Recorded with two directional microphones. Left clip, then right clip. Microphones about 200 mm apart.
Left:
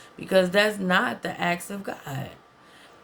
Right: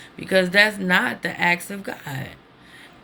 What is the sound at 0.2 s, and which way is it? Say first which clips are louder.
Speech: right 3 dB; 20° left (ahead or behind).